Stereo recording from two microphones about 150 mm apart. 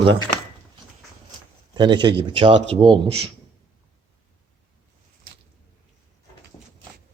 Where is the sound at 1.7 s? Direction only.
30° right (ahead or behind).